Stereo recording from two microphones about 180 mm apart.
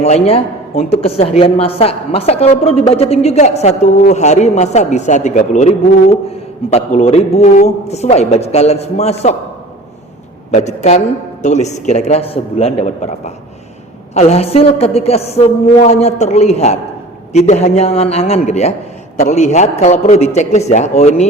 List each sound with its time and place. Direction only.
0.0 s a woman's voice: 35° left (ahead or behind)
10.5 s a woman's voice: 40° left (ahead or behind)